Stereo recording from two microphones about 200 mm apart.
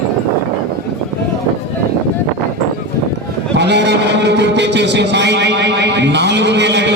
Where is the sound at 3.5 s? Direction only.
60° right (ahead or behind).